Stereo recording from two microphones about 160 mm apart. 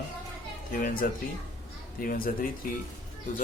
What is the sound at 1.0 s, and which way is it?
Speech, 60° left (ahead or behind).